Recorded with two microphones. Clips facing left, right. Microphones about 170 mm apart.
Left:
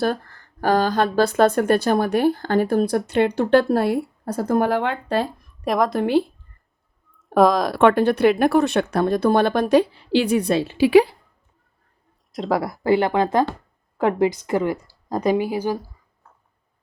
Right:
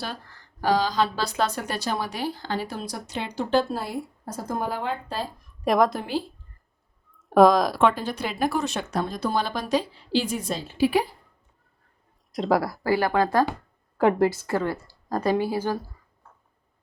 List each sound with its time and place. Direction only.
0.0 s speech: 50° left (ahead or behind)
5.6 s a woman's voice: centre (ahead or behind)
6.0 s speech: 65° left (ahead or behind)
7.2 s speech: centre (ahead or behind)
7.8 s speech: 60° left (ahead or behind)
12.3 s a woman's voice: centre (ahead or behind)
12.6 s speech: 20° left (ahead or behind)
14.0 s a woman's voice: centre (ahead or behind)
14.3 s speech: 15° left (ahead or behind)